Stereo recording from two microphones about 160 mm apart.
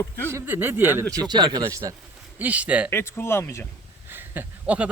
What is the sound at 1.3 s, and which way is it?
Speech, 25° right (ahead or behind).